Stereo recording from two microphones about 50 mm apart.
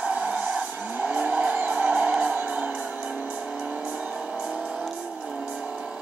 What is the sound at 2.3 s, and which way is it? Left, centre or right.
Music, right.